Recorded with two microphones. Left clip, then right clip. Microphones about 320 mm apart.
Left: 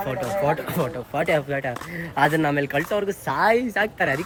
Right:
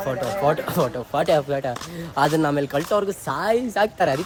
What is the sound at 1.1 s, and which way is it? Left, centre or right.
A woman's voice, centre.